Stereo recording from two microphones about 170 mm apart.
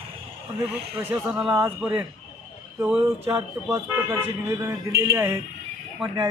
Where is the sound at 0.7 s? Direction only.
10° right (ahead or behind).